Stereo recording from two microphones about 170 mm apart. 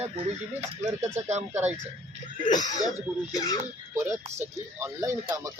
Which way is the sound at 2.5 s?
25° left (ahead or behind).